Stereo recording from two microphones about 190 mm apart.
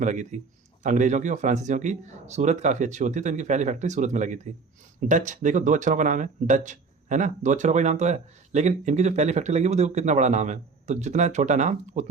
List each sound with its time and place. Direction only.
0.0 s speech: 40° right (ahead or behind)